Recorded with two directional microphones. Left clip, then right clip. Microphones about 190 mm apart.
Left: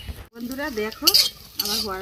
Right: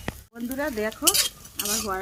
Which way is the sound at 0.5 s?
5° left (ahead or behind).